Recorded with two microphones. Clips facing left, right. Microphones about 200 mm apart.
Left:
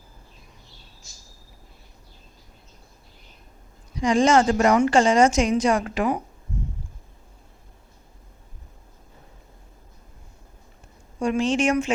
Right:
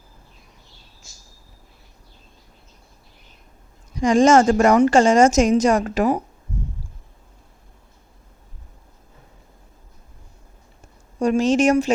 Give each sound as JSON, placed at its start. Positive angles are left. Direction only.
{"t": 3.9, "sound": "a woman's voice", "side_deg": -45}
{"t": 11.2, "sound": "speech", "side_deg": -40}